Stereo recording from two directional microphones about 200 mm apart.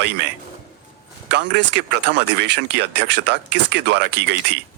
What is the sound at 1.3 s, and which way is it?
Speech, 60° right (ahead or behind).